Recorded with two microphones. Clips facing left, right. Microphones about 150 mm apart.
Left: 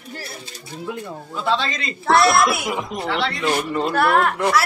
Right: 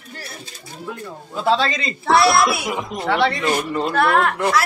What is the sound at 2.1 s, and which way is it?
Speech, centre (ahead or behind).